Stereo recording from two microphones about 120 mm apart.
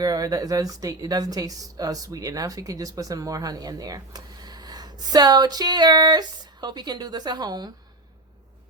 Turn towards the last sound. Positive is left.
turn(degrees=-35)  # may be behind; listen again after turning